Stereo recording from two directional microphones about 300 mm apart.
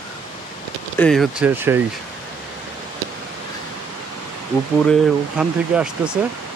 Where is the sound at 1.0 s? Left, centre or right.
Centre.